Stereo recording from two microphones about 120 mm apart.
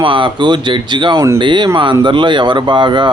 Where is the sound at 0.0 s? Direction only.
45° right (ahead or behind).